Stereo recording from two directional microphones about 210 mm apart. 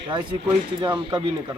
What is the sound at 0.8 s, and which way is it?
Speech, 20° right (ahead or behind).